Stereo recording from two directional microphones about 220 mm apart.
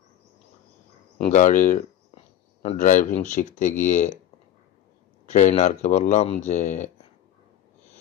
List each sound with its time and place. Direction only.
1.1 s speech: 30° left (ahead or behind)
5.3 s speech: 30° left (ahead or behind)